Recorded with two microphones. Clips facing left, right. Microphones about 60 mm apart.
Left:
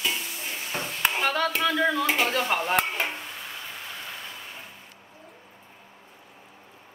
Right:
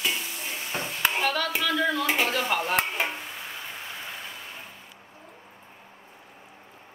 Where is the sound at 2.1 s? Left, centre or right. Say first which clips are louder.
Left 1 dB; centre.